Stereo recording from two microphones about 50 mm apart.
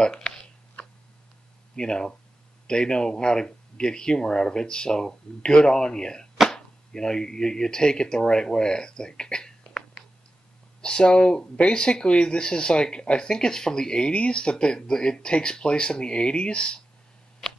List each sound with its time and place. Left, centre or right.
0.0 s speech: centre
0.8 s tick: left
1.8 s speech: centre